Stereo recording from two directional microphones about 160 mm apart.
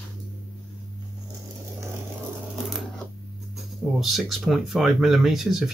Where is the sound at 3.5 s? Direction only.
Centre (ahead or behind).